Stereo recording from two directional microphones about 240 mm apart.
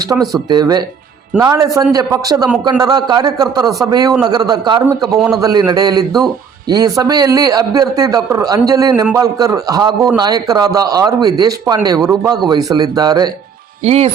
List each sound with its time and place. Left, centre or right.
0.5 s a man's voice: centre